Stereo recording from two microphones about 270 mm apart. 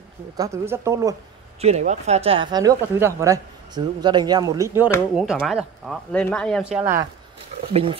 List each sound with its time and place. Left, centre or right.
0.4 s speech: centre
1.6 s speech: right; by 7.1 s centre
7.7 s speech: centre